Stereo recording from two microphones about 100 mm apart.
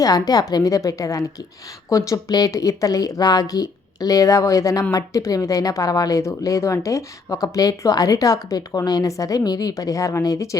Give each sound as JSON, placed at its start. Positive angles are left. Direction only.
{"t": 0.0, "sound": "speech", "side_deg": 40}